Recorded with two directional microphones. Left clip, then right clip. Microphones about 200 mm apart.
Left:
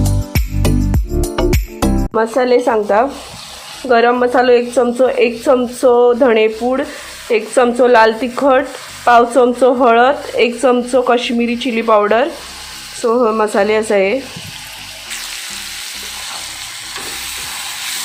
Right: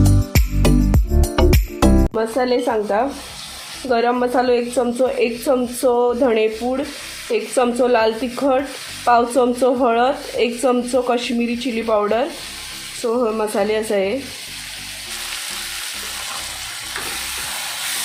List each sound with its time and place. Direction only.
0.0 s music: centre (ahead or behind)
2.1 s speech: 20° left (ahead or behind)